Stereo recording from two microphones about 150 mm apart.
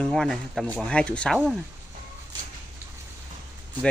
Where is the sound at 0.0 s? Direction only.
Centre (ahead or behind).